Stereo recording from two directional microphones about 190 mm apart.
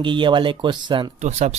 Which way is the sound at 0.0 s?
25° right (ahead or behind).